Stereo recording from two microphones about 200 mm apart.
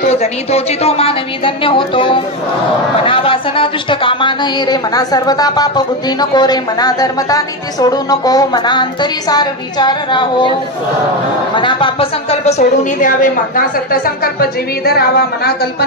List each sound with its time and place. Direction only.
0.0 s speech: 30° left (ahead or behind)
11.5 s a woman's voice: 25° left (ahead or behind); by 15.7 s 50° left (ahead or behind)